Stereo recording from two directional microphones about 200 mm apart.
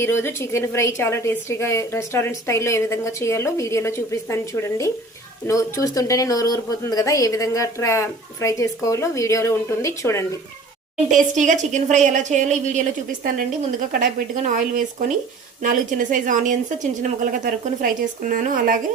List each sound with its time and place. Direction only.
0.0 s a woman's voice: 10° left (ahead or behind)
11.1 s a woman's voice: 40° right (ahead or behind)